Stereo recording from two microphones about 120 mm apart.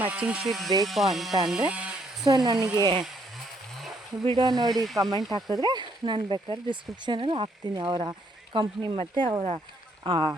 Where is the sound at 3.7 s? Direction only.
Centre (ahead or behind).